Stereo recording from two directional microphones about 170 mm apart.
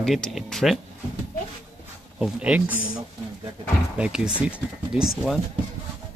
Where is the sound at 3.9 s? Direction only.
5° right (ahead or behind).